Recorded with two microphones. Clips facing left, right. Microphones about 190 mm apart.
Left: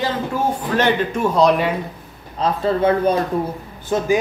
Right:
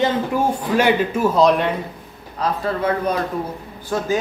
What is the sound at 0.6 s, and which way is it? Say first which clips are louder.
A man's voice: right 1 dB; 10° right (ahead or behind).